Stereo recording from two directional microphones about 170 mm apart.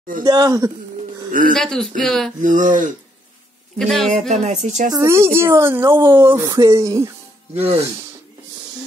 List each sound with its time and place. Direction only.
0.2 s speech: 25° right (ahead or behind)
1.5 s speech: 5° left (ahead or behind)
2.4 s speech: 50° right (ahead or behind)
3.7 s speech: 5° left (ahead or behind)
4.3 s speech: 40° right (ahead or behind)
4.9 s speech: 15° right (ahead or behind)
7.5 s speech: 35° right (ahead or behind)